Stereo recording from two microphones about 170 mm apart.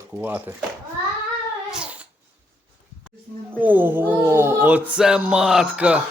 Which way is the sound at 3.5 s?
10° right (ahead or behind).